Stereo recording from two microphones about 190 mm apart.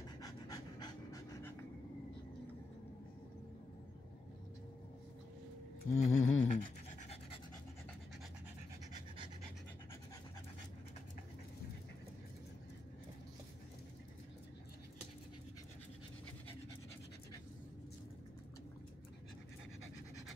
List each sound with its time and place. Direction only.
0.2 s pant: 20° left (ahead or behind)
5.9 s pant: 40° left (ahead or behind)